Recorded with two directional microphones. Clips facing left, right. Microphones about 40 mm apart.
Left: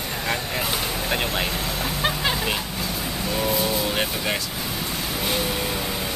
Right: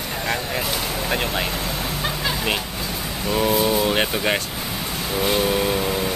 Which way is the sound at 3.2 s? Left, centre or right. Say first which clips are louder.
Right 5 dB; centre.